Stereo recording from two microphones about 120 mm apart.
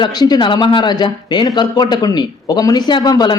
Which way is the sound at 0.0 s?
35° left (ahead or behind).